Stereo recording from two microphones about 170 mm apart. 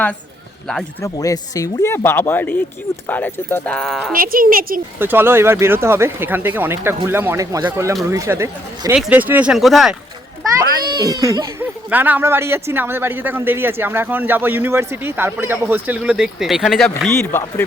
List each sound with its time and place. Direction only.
1.0 s speech: 20° left (ahead or behind); by 4.1 s centre (ahead or behind)
4.1 s speech: 55° right (ahead or behind)
4.9 s speech: 15° right (ahead or behind)
10.8 s speech: 25° right (ahead or behind)
11.6 s speech: 10° right (ahead or behind)
17.6 s speech: 10° left (ahead or behind)